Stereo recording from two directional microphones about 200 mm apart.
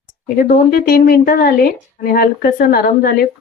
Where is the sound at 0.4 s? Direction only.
45° left (ahead or behind).